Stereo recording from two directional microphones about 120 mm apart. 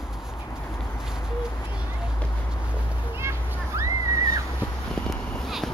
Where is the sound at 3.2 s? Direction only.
25° right (ahead or behind).